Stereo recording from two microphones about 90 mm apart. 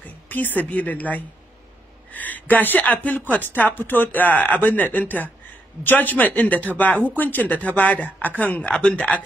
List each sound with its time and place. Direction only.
0.3 s speech: 20° left (ahead or behind)
2.0 s a sound: 20° left (ahead or behind)
2.5 s speech: 20° left (ahead or behind)